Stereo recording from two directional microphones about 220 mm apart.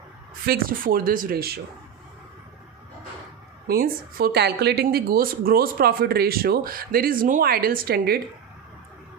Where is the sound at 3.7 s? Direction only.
45° right (ahead or behind).